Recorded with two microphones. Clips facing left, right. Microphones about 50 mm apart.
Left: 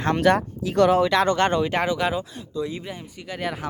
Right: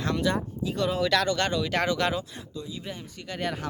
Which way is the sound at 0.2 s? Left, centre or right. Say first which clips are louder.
Left 8 dB; left.